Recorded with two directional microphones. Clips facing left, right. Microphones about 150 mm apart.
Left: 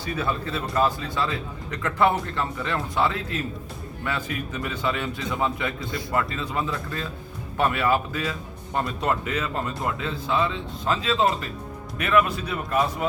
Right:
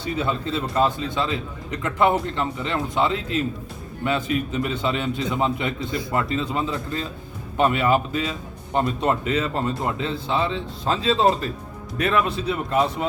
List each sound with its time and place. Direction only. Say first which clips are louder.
0.0 s speech: right 2 dB; 25° right (ahead or behind)